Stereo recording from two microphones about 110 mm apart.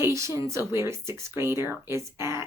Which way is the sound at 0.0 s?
25° right (ahead or behind).